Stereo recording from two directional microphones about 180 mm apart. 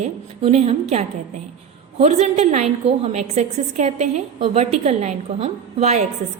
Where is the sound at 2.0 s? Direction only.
40° right (ahead or behind).